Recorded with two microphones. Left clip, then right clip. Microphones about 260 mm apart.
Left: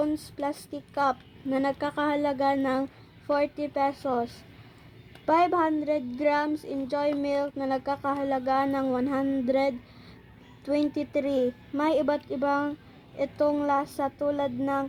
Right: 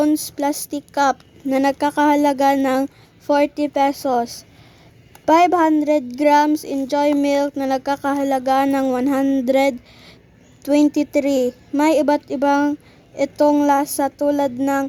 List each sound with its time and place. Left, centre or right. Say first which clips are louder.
0.0 s speech: right 10 dB; right